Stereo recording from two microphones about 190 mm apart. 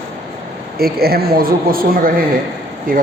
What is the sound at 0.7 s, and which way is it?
A man's voice, 55° right (ahead or behind).